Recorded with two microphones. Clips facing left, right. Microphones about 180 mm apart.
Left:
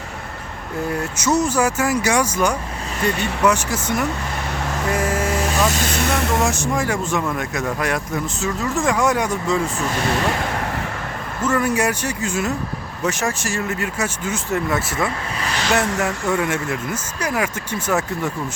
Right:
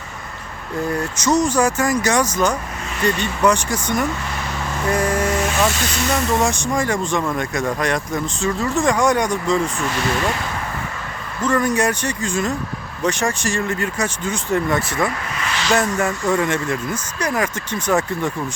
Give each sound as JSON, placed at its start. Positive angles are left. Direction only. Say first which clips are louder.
{"t": 0.9, "sound": "speech", "louder": "right 1 dB", "side_deg": 5}
{"t": 4.9, "sound": "vehicle", "louder": "right 3 dB", "side_deg": 5}
{"t": 5.4, "sound": "speech", "louder": "even", "side_deg": 40}
{"t": 6.4, "sound": "speech", "louder": "right 1 dB", "side_deg": 5}
{"t": 9.7, "sound": "speech", "louder": "even", "side_deg": 40}
{"t": 11.4, "sound": "speech", "louder": "right 1 dB", "side_deg": 5}
{"t": 15.4, "sound": "a sound", "louder": "left 1 dB", "side_deg": 40}
{"t": 15.7, "sound": "speech", "louder": "right 2 dB", "side_deg": 70}
{"t": 16.0, "sound": "speech", "louder": "right 2 dB", "side_deg": 5}